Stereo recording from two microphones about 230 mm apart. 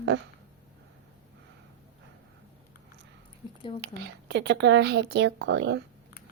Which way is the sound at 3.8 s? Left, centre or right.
Right.